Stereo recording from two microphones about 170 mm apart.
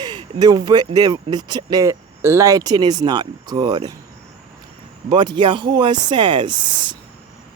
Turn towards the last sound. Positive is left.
turn(degrees=-25)  # may be behind; listen again after turning